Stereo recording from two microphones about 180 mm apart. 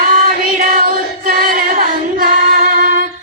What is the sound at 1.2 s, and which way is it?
Music, 50° right (ahead or behind).